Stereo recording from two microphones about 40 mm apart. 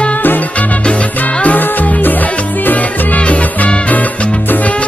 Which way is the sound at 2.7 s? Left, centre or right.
Left.